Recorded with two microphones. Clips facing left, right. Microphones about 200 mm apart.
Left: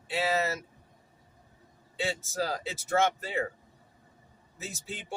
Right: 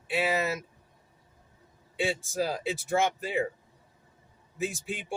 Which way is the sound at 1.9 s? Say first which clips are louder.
Right 3 dB; 15° right (ahead or behind).